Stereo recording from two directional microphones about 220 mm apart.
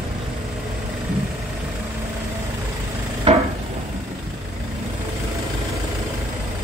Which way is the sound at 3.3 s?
30° right (ahead or behind).